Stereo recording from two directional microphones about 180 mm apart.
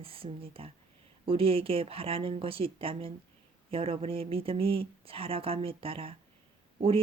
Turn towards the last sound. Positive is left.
turn(degrees=-30)  # may be behind; listen again after turning